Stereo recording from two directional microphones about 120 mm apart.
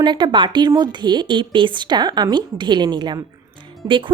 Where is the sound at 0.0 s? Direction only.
40° right (ahead or behind).